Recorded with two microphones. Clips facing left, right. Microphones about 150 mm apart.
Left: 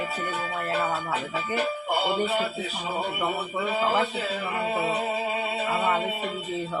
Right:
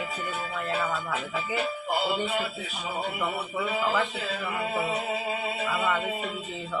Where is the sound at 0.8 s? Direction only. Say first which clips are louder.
Left 3 dB; 30° left (ahead or behind).